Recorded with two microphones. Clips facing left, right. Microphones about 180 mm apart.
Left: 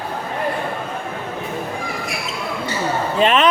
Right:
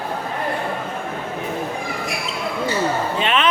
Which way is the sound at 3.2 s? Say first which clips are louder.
Left 6 dB; 40° left (ahead or behind).